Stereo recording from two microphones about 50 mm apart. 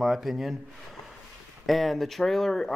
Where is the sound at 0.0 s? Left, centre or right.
Centre.